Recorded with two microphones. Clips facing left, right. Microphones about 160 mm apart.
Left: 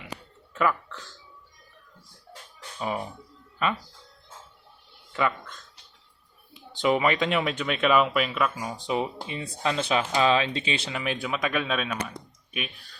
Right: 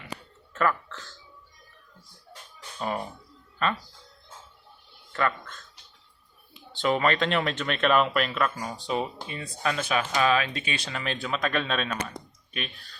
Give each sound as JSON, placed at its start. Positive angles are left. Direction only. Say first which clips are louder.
{"t": 0.5, "sound": "a sound", "louder": "left 1 dB", "side_deg": 10}
{"t": 2.7, "sound": "speech", "louder": "even", "side_deg": 5}
{"t": 5.1, "sound": "speech", "louder": "left 1 dB", "side_deg": 10}
{"t": 6.8, "sound": "speech", "louder": "left 1 dB", "side_deg": 10}
{"t": 8.8, "sound": "speech", "louder": "left 2 dB", "side_deg": 20}